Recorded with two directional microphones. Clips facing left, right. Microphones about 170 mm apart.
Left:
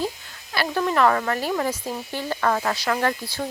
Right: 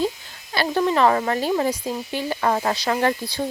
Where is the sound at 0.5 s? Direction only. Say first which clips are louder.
Right 2 dB; 25° right (ahead or behind).